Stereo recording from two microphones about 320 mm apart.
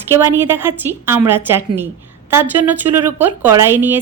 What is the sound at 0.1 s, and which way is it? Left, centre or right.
A woman's voice, centre.